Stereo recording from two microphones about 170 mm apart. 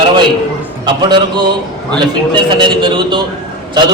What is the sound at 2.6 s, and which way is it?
Speech, 30° right (ahead or behind).